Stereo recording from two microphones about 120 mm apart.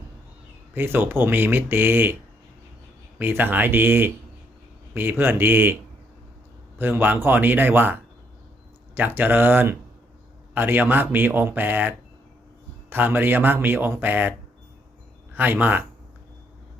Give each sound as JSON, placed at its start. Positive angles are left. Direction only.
{"t": 0.7, "sound": "speech", "side_deg": -20}
{"t": 3.2, "sound": "speech", "side_deg": -15}
{"t": 6.7, "sound": "speech", "side_deg": -15}
{"t": 9.0, "sound": "speech", "side_deg": -15}